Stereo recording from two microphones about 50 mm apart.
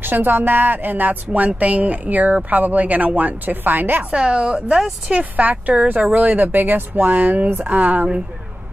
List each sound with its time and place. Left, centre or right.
0.0 s speech: right
4.1 s a woman's voice: centre
5.3 s speech: right